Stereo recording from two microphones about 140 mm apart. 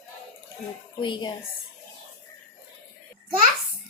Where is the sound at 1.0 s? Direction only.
35° left (ahead or behind).